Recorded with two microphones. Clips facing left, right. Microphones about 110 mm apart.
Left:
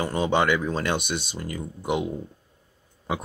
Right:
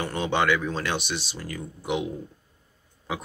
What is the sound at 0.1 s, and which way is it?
Speech, 40° left (ahead or behind).